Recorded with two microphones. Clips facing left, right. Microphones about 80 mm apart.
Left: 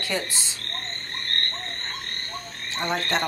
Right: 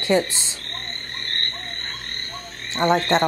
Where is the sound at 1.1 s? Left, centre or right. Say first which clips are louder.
Even; centre.